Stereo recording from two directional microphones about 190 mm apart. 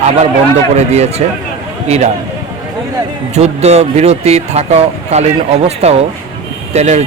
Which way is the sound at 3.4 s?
35° right (ahead or behind).